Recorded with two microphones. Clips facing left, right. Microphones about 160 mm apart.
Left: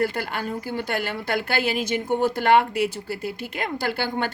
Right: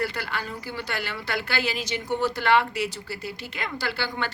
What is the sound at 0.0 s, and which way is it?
A woman's voice, 50° left (ahead or behind).